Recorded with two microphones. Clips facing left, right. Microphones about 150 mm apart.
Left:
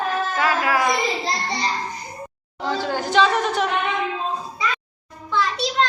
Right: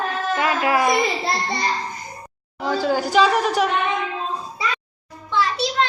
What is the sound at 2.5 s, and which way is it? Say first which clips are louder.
Speech: right 3 dB; 10° right (ahead or behind).